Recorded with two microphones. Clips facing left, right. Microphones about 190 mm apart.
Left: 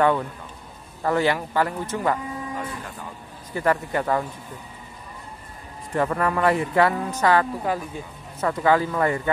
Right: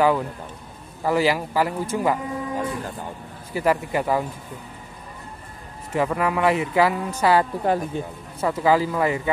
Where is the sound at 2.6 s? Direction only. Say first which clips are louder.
Right 5 dB; 30° right (ahead or behind).